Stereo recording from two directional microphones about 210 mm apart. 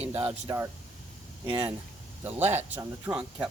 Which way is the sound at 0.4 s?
15° right (ahead or behind).